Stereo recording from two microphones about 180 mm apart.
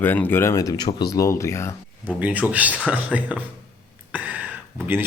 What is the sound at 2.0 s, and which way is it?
Speech, 10° right (ahead or behind).